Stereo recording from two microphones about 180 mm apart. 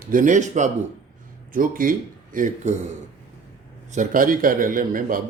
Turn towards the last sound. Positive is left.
turn(degrees=-50)  # may be behind; listen again after turning